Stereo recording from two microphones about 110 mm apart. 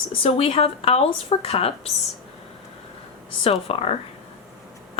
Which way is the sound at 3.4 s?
65° left (ahead or behind).